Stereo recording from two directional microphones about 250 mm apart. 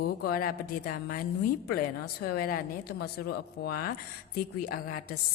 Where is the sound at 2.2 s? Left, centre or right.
Left.